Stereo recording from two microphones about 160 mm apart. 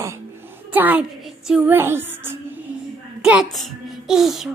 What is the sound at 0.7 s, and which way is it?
A woman's voice, 10° right (ahead or behind).